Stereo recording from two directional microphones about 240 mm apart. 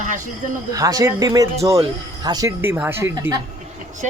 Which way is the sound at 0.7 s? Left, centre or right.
Centre.